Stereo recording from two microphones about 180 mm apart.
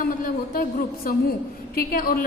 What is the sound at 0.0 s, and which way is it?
A woman's voice, 50° left (ahead or behind).